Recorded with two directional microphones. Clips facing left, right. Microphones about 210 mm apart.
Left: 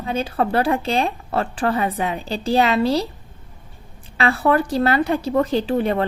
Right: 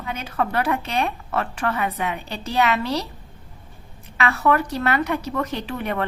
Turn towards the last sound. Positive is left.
turn(degrees=30)  # may be behind; listen again after turning